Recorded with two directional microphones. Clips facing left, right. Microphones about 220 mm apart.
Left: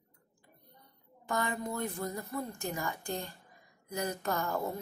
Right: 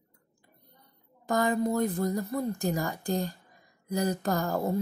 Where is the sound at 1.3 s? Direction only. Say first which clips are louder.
Right 8 dB; 35° right (ahead or behind).